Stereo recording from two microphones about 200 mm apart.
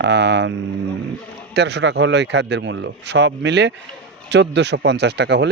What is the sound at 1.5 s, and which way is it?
Speech, 60° right (ahead or behind).